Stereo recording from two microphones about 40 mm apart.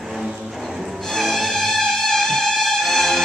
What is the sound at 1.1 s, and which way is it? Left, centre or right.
Music, centre.